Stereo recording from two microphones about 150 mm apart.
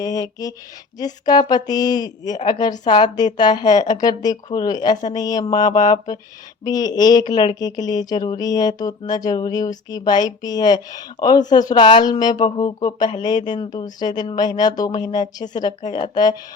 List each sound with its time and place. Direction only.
0.0 s speech: 25° left (ahead or behind)